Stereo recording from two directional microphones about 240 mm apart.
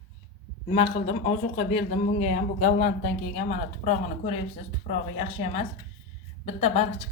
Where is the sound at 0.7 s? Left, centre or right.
Left.